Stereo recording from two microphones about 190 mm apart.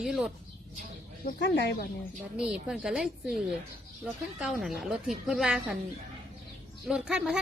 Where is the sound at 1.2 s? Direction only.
60° left (ahead or behind).